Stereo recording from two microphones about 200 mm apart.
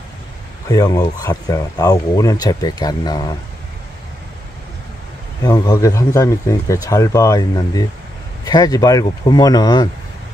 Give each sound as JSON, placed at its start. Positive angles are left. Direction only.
{"t": 0.7, "sound": "speech", "side_deg": 20}
{"t": 5.4, "sound": "speech", "side_deg": 20}